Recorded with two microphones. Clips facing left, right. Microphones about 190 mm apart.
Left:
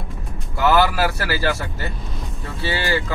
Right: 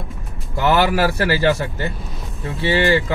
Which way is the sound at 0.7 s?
20° right (ahead or behind).